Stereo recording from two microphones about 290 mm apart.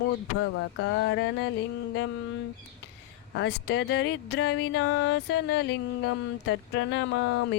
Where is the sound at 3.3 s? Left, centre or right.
Left.